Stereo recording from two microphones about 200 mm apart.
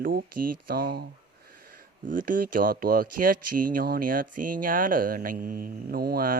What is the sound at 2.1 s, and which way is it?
Speech, 45° right (ahead or behind).